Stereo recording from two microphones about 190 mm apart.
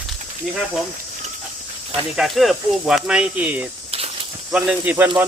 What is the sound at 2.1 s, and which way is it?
Speech, centre (ahead or behind).